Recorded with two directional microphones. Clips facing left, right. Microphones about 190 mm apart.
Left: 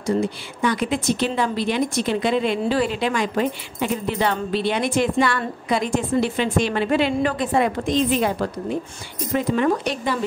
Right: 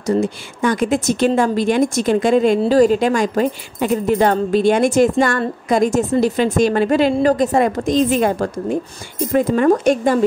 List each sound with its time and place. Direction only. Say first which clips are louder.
0.0 s speech: right 4 dB; 45° right (ahead or behind)